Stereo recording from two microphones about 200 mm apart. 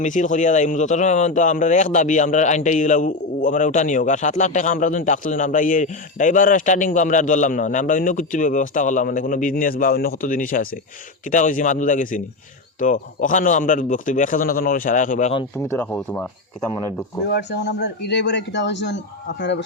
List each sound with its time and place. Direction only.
0.0 s speech: 40° left (ahead or behind)
15.5 s speech: 10° left (ahead or behind)
17.2 s a man's voice: 55° left (ahead or behind)